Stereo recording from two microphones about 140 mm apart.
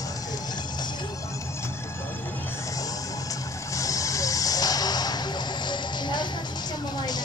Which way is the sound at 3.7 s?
25° left (ahead or behind).